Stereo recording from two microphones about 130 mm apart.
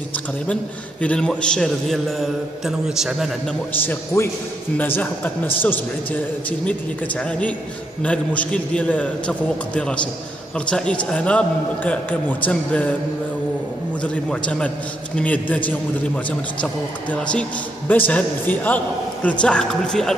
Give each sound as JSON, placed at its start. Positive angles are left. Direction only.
{"t": 1.0, "sound": "a man's voice", "side_deg": 5}
{"t": 3.8, "sound": "a man's voice", "side_deg": 15}
{"t": 7.2, "sound": "a man's voice", "side_deg": 10}
{"t": 14.0, "sound": "a man's voice", "side_deg": 10}